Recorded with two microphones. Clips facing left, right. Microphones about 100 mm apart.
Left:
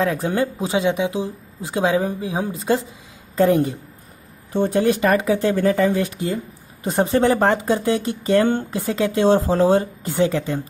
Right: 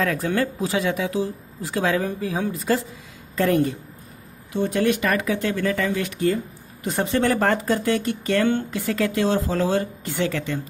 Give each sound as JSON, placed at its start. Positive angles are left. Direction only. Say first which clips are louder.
{"t": 0.0, "sound": "speech", "louder": "left 2 dB", "side_deg": 25}